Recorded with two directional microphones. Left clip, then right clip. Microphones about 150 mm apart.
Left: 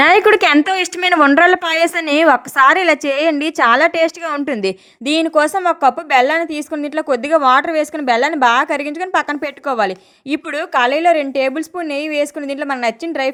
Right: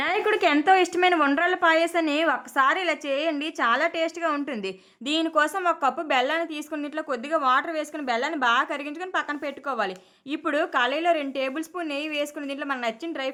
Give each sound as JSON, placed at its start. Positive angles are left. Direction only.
{"t": 0.0, "sound": "a woman's voice", "side_deg": 65}